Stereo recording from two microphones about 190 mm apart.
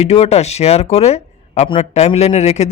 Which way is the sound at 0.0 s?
35° left (ahead or behind).